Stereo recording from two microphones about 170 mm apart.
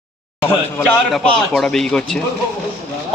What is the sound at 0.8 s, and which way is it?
A man's voice, 5° left (ahead or behind).